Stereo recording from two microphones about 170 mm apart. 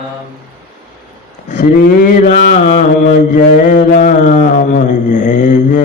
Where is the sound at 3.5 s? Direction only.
50° left (ahead or behind).